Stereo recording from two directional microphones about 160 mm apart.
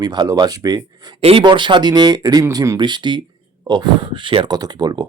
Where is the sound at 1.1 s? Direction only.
35° right (ahead or behind).